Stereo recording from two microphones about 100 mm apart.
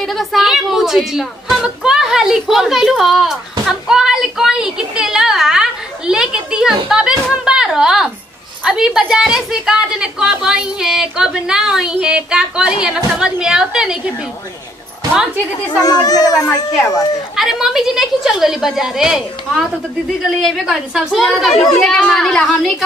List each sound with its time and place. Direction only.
0.0 s a woman's voice: centre (ahead or behind)
15.8 s a child's voice: 40° left (ahead or behind)
16.7 s speech: 5° left (ahead or behind)